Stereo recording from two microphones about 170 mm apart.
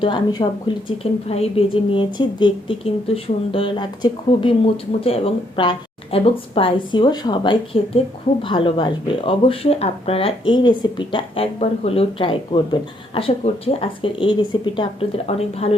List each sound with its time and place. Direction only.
0.0 s speech: 25° left (ahead or behind)
1.3 s speech: 35° left (ahead or behind)